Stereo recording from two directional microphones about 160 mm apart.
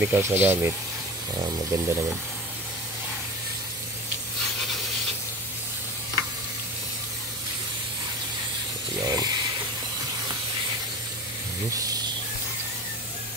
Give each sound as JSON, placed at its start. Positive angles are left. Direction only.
{"t": 0.0, "sound": "speech", "side_deg": -15}
{"t": 1.3, "sound": "speech", "side_deg": -25}
{"t": 9.0, "sound": "a sound", "side_deg": -25}
{"t": 11.7, "sound": "snake", "side_deg": -20}